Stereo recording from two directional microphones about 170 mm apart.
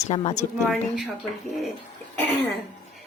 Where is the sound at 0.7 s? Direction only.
Centre (ahead or behind).